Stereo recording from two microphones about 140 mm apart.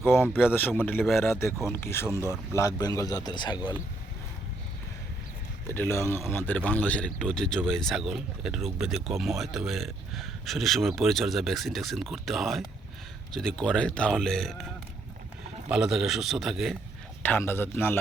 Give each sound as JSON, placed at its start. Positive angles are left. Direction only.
{"t": 0.0, "sound": "speech", "side_deg": 15}
{"t": 5.7, "sound": "speech", "side_deg": 15}
{"t": 15.7, "sound": "speech", "side_deg": -5}
{"t": 17.2, "sound": "speech", "side_deg": 15}